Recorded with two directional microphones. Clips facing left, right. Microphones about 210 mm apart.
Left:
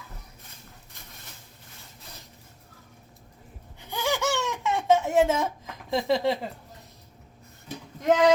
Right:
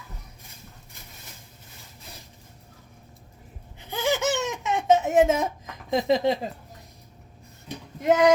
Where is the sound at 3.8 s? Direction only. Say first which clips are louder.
Right 3 dB; 20° right (ahead or behind).